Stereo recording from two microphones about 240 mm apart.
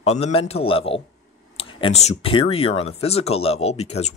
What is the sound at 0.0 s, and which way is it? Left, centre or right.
A man's voice, left.